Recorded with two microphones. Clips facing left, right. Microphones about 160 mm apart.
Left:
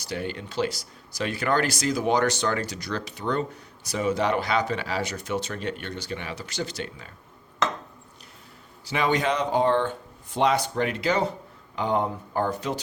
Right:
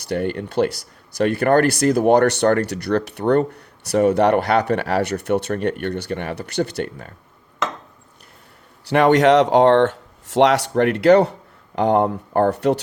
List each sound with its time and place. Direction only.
0.0 s speech: 60° right (ahead or behind)
8.8 s speech: 65° right (ahead or behind)